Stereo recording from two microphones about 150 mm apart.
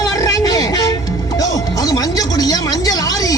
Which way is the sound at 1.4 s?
25° left (ahead or behind).